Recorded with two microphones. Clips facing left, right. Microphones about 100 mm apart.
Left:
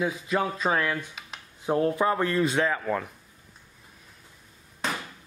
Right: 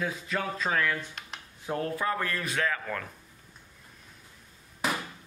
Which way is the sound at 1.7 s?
20° left (ahead or behind).